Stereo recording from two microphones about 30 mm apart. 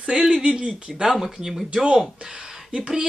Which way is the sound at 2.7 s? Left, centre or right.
Right.